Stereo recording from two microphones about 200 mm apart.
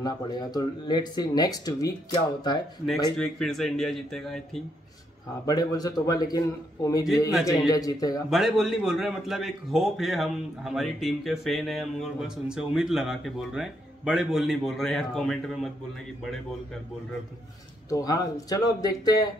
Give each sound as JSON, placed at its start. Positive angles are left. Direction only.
{"t": 0.0, "sound": "speech", "side_deg": 20}
{"t": 3.2, "sound": "a man's voice", "side_deg": 0}
{"t": 5.5, "sound": "a man's voice", "side_deg": 20}
{"t": 8.3, "sound": "a man's voice", "side_deg": 0}
{"t": 17.8, "sound": "speech", "side_deg": 15}